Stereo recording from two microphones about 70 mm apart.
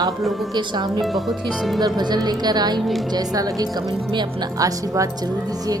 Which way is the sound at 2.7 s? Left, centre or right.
Centre.